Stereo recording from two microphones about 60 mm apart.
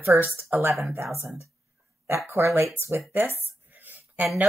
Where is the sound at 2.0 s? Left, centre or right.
Right.